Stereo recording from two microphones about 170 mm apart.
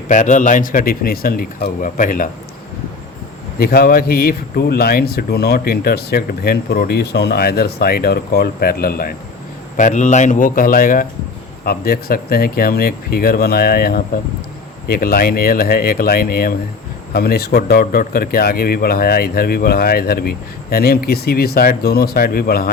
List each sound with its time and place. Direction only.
0.1 s a man's voice: 45° left (ahead or behind)
3.6 s speech: 65° left (ahead or behind)
9.7 s a man's voice: 45° left (ahead or behind)